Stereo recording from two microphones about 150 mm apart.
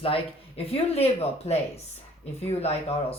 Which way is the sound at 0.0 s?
40° left (ahead or behind).